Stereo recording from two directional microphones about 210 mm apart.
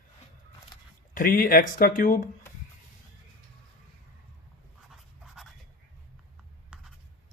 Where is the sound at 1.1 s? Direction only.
40° left (ahead or behind).